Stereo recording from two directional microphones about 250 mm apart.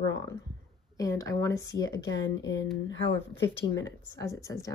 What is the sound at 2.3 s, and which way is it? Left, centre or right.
Speech, left.